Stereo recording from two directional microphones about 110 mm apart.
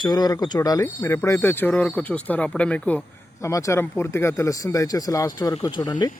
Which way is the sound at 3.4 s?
25° left (ahead or behind).